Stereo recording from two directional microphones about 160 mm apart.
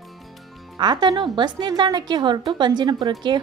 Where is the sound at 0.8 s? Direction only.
25° right (ahead or behind).